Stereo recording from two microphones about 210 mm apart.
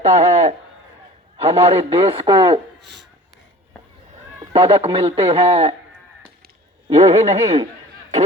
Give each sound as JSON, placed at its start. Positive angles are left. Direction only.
{"t": 0.0, "sound": "a man's voice", "side_deg": -30}
{"t": 2.8, "sound": "a sound", "side_deg": -55}
{"t": 4.5, "sound": "a man's voice", "side_deg": -25}
{"t": 6.8, "sound": "speech", "side_deg": -30}